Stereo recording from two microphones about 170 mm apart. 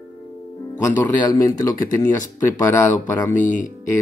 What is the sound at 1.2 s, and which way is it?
A man's voice, 20° left (ahead or behind).